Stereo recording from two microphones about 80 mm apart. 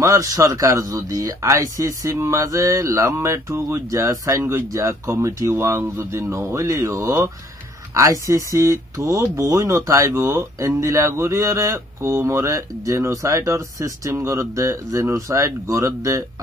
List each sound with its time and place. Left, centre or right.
0.0 s speech: right
4.4 s speech: right